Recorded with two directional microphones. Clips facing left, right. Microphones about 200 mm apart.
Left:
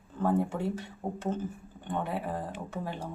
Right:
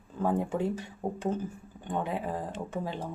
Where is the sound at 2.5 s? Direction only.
25° right (ahead or behind).